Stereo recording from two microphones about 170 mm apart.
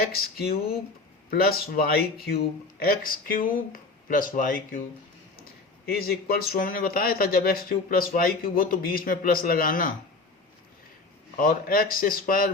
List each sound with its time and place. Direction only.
0.0 s speech: 60° left (ahead or behind)
11.3 s speech: 55° left (ahead or behind)